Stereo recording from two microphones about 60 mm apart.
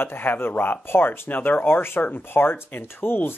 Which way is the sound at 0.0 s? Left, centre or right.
Left.